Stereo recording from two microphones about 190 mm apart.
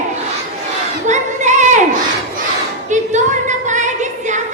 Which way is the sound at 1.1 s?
40° right (ahead or behind).